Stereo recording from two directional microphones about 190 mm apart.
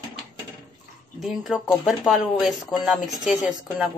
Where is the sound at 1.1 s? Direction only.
Centre (ahead or behind).